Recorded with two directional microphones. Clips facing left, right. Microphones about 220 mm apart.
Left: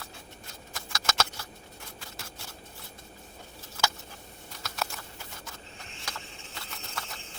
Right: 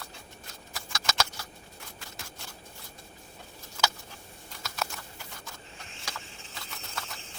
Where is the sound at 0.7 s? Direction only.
Centre (ahead or behind).